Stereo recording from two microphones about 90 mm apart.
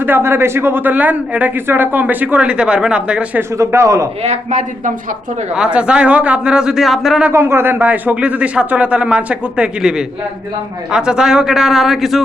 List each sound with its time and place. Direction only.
0.0 s speech: 25° right (ahead or behind)
3.6 s a man's voice: 35° right (ahead or behind)
5.5 s speech: 10° right (ahead or behind)
7.3 s speech: 25° right (ahead or behind); by 9.9 s 10° right (ahead or behind)
10.9 s speech: 10° right (ahead or behind)